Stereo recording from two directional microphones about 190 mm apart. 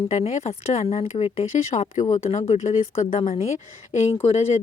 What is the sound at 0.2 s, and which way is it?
A woman's voice, 35° left (ahead or behind).